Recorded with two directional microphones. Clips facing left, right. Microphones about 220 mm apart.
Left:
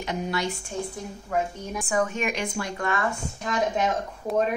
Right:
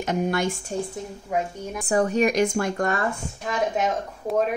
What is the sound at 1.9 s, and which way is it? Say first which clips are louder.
Speech: right 6 dB; 35° right (ahead or behind).